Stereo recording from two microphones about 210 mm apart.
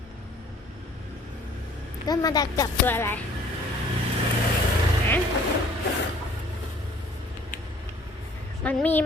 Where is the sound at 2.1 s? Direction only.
20° left (ahead or behind).